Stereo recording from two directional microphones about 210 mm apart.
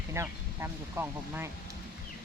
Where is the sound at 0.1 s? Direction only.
10° right (ahead or behind).